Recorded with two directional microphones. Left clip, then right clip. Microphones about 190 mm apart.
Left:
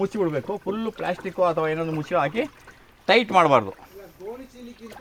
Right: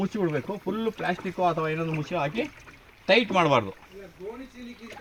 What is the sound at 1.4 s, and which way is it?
Speech, 35° left (ahead or behind).